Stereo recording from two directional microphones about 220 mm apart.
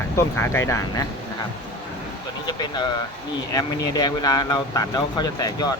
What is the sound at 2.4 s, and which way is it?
Speech, 20° left (ahead or behind).